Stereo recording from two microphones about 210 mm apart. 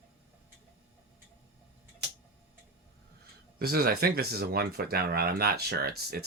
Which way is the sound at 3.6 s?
45° right (ahead or behind).